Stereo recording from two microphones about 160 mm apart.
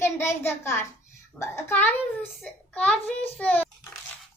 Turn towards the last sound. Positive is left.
turn(degrees=10)  # may be behind; listen again after turning